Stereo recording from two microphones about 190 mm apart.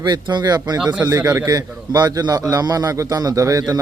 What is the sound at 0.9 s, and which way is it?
A man's voice, 10° right (ahead or behind).